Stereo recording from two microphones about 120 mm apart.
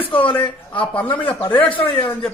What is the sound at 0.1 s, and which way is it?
Speech, 45° left (ahead or behind).